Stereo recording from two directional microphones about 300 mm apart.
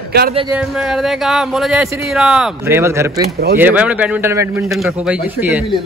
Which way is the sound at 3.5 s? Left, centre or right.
Centre.